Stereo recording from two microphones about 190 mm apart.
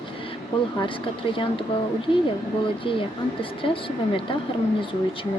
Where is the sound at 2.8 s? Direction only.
25° left (ahead or behind).